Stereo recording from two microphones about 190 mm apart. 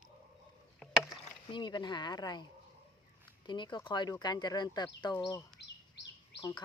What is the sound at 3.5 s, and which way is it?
Speech, 25° left (ahead or behind).